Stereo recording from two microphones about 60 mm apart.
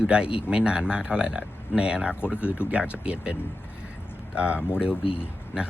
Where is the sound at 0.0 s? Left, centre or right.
Centre.